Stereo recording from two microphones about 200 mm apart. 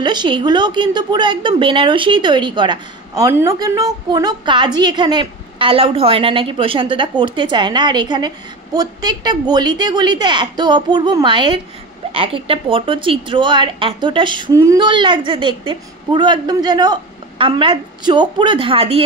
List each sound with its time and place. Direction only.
0.0 s speech: 20° right (ahead or behind)